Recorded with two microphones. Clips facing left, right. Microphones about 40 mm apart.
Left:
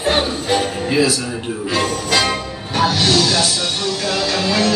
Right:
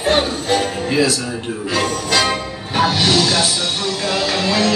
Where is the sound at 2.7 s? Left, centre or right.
Centre.